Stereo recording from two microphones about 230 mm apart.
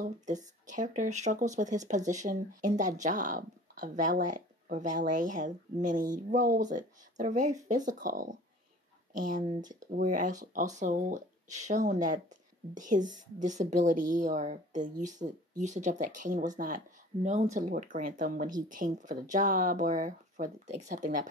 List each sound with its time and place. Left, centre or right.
0.0 s speech: right